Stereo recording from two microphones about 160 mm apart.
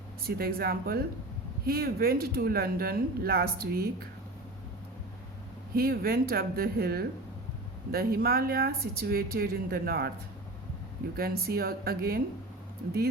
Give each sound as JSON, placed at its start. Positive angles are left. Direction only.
{"t": 0.2, "sound": "speech", "side_deg": -70}
{"t": 5.7, "sound": "speech", "side_deg": -70}
{"t": 11.2, "sound": "speech", "side_deg": -70}